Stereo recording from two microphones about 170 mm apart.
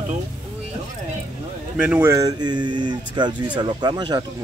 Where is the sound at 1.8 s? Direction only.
10° right (ahead or behind).